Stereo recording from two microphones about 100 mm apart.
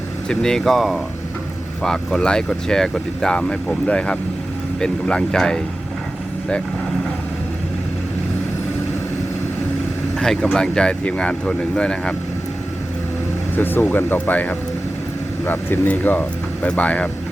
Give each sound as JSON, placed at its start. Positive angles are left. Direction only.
{"t": 0.3, "sound": "speech", "side_deg": 5}
{"t": 10.2, "sound": "speech", "side_deg": 5}
{"t": 13.6, "sound": "speech", "side_deg": 20}